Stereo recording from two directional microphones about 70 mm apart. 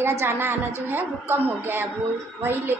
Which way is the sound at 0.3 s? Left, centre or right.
Right.